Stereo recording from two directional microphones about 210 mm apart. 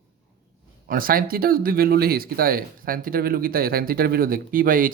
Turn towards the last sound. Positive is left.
turn(degrees=-40)  # may be behind; listen again after turning